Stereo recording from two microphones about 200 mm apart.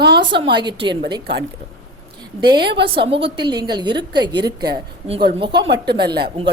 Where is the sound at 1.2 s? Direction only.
55° right (ahead or behind).